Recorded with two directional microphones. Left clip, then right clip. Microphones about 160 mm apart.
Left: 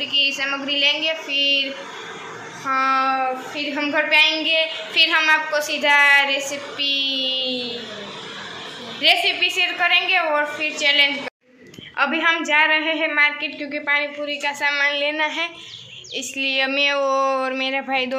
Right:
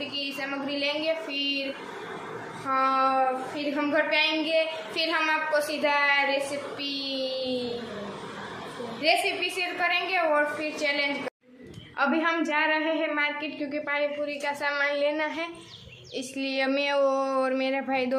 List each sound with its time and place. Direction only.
0.1 s a child's voice: centre (ahead or behind)
2.7 s a child's voice: centre (ahead or behind)
9.0 s a child's voice: 5° left (ahead or behind)